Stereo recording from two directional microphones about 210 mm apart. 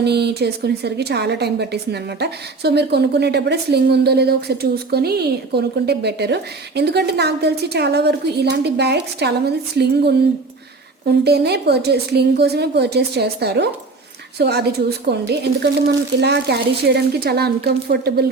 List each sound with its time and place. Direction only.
0.0 s a woman's voice: 50° right (ahead or behind)